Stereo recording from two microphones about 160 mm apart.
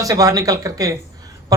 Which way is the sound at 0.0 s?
20° right (ahead or behind).